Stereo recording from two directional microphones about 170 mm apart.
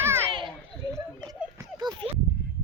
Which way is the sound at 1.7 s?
25° right (ahead or behind).